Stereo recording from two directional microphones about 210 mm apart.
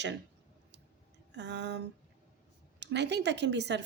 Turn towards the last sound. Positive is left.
turn(degrees=-55)  # may be behind; listen again after turning